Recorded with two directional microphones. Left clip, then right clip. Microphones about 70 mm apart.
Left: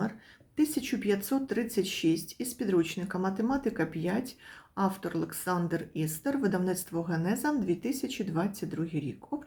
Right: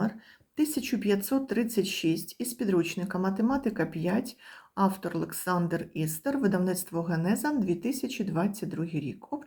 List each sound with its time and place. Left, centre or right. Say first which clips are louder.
0.5 s speech: even; right
8.8 s speech: even; right